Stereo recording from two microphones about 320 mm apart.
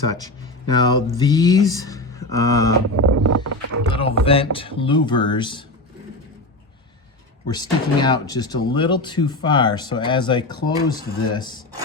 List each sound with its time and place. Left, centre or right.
0.7 s speech: centre
2.9 s a sound: right
3.8 s speech: centre
7.5 s speech: centre